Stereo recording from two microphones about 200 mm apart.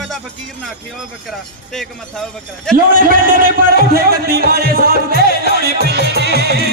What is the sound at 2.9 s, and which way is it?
Speech, 45° right (ahead or behind).